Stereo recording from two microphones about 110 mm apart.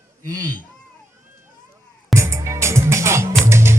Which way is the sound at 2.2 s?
25° right (ahead or behind).